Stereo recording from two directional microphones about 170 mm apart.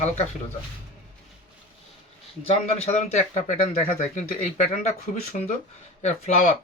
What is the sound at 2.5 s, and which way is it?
Speech, 35° left (ahead or behind).